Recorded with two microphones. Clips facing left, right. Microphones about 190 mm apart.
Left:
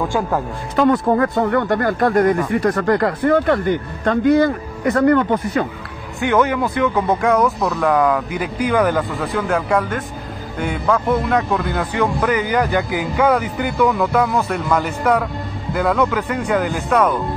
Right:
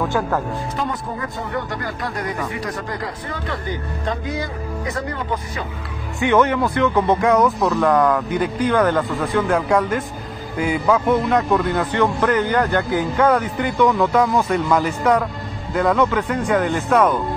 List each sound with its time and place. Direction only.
0.7 s speech: 65° left (ahead or behind)
6.2 s speech: 5° left (ahead or behind)